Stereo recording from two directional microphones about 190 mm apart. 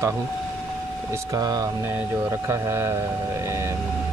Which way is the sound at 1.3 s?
20° right (ahead or behind).